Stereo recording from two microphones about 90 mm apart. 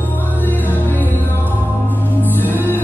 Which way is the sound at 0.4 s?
20° left (ahead or behind).